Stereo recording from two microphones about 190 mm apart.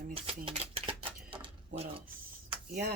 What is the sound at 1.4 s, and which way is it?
Keys jangling, 30° right (ahead or behind).